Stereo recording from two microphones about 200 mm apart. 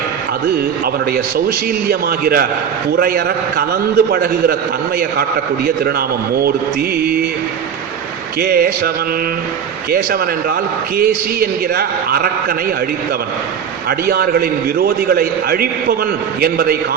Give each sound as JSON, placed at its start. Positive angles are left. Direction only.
{"t": 1.1, "sound": "a man's voice", "side_deg": -50}
{"t": 6.9, "sound": "a man's voice", "side_deg": -50}
{"t": 8.4, "sound": "a man's voice", "side_deg": -50}
{"t": 9.9, "sound": "a man's voice", "side_deg": -50}
{"t": 14.1, "sound": "a man's voice", "side_deg": -50}